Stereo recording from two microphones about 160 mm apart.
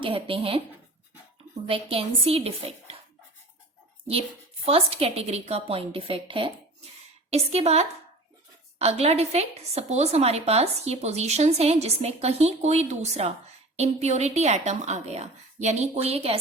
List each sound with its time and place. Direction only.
0.0 s a woman's voice: 35° right (ahead or behind)
1.6 s a woman's voice: 35° right (ahead or behind)
4.6 s a woman's voice: 40° right (ahead or behind)